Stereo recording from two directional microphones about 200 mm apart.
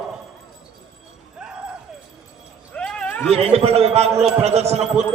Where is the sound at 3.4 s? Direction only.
30° right (ahead or behind).